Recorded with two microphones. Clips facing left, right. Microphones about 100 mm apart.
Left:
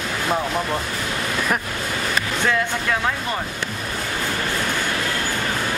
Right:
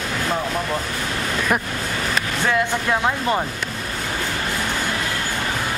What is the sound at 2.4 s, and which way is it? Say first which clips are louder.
Speech: right 2 dB; 20° right (ahead or behind).